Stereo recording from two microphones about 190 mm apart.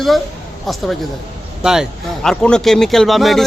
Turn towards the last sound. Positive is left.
turn(degrees=0)  # may be behind; listen again after turning